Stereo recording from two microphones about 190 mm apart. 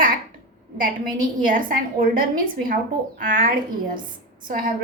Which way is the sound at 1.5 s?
45° right (ahead or behind).